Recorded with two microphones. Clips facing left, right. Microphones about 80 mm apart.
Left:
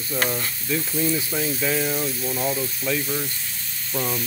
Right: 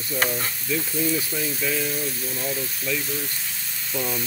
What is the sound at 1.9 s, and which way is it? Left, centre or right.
Speech, left.